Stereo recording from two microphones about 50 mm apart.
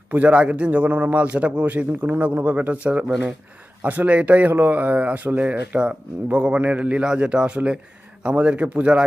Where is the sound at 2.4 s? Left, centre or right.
Right.